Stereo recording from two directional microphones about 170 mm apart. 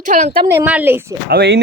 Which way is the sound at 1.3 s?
75° right (ahead or behind).